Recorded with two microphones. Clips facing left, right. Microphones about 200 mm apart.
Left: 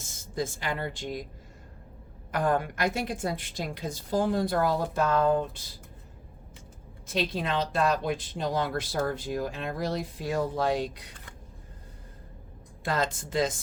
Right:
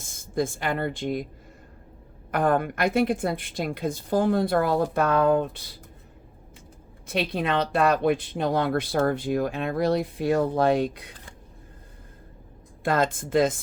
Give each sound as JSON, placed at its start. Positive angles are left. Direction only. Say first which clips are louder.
{"t": 0.0, "sound": "speech", "louder": "right 5 dB", "side_deg": -55}
{"t": 2.3, "sound": "speech", "louder": "right 4 dB", "side_deg": -55}
{"t": 7.1, "sound": "speech", "louder": "right 4 dB", "side_deg": -60}
{"t": 12.8, "sound": "speech", "louder": "right 5 dB", "side_deg": -55}